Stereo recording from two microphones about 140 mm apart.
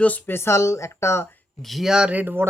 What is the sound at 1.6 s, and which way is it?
Speech, centre (ahead or behind).